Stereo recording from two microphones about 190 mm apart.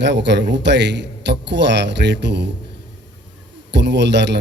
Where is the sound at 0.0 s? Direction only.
65° right (ahead or behind).